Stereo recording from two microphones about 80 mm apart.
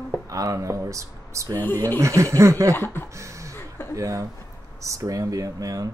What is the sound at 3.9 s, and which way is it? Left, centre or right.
Speech, right.